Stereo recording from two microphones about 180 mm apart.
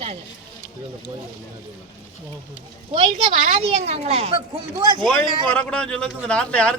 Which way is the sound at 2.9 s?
30° right (ahead or behind).